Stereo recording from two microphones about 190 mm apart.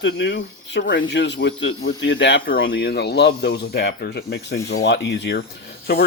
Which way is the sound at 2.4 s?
55° left (ahead or behind).